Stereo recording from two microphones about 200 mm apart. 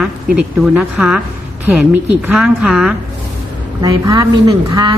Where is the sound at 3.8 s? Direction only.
20° right (ahead or behind).